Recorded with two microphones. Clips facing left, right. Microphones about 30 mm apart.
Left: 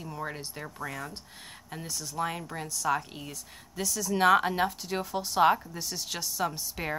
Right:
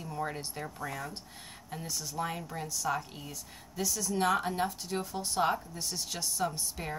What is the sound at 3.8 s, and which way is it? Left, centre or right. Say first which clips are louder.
Speech: left 2 dB; centre.